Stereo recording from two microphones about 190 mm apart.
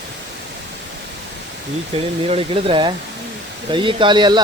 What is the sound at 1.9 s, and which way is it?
Speech, 30° right (ahead or behind).